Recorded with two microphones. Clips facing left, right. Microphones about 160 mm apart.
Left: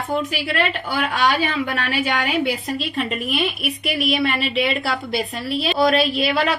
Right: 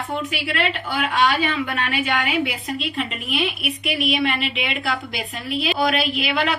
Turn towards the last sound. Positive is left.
turn(degrees=40)  # may be behind; listen again after turning